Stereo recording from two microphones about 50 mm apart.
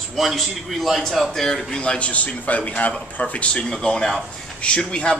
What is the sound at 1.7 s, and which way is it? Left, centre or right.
A man's voice, centre.